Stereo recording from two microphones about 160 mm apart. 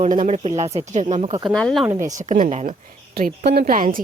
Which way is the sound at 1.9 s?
20° right (ahead or behind).